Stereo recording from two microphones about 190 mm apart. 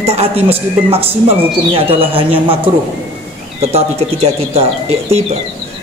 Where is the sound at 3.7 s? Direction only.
35° right (ahead or behind).